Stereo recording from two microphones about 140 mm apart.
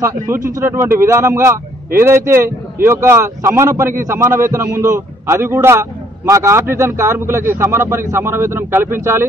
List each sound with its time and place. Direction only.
0.6 s a man's voice: 20° right (ahead or behind)